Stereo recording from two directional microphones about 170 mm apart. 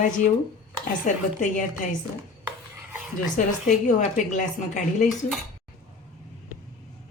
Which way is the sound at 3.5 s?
45° left (ahead or behind).